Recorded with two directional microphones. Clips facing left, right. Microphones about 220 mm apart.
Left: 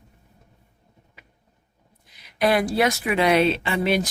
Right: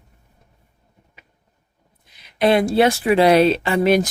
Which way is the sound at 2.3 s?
25° right (ahead or behind).